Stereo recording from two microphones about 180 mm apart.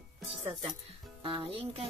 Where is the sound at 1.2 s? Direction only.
30° right (ahead or behind).